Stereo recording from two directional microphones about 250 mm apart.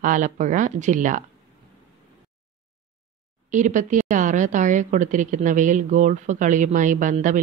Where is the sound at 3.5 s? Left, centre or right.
Right.